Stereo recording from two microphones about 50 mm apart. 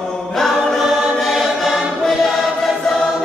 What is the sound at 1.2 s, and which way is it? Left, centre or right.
Choir, centre.